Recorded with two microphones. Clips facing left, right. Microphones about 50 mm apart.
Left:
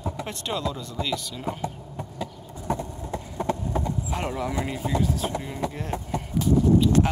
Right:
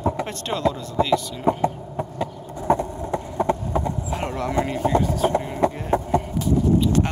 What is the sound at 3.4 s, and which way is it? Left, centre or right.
Clip-clop, right.